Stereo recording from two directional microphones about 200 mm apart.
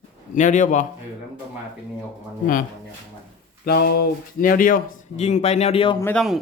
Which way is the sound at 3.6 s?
50° left (ahead or behind).